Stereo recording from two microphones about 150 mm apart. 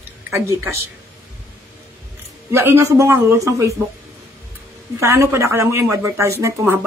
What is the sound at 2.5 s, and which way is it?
Speech, 15° right (ahead or behind).